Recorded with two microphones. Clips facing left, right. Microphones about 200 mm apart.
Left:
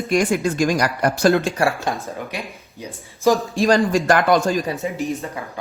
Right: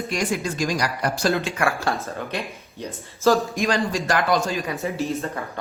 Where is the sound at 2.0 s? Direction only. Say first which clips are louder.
Even; 15° left (ahead or behind).